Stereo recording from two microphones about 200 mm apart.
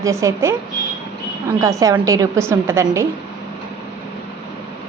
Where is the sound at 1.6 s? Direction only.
15° right (ahead or behind).